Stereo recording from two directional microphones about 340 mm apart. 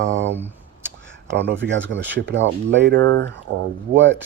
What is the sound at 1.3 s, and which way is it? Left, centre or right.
Speech, right.